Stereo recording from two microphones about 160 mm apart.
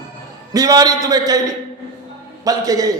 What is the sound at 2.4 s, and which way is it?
Speech, 20° right (ahead or behind).